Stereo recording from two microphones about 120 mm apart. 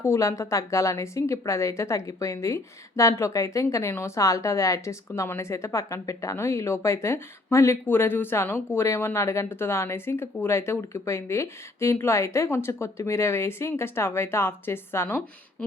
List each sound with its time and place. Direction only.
0.0 s a woman's voice: 25° left (ahead or behind)